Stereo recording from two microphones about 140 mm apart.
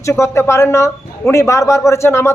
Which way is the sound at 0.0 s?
20° left (ahead or behind).